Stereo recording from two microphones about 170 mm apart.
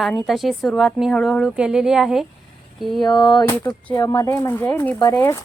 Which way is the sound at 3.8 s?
15° left (ahead or behind).